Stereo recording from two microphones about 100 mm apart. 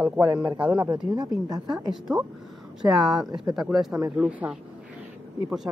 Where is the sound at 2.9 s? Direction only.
5° right (ahead or behind).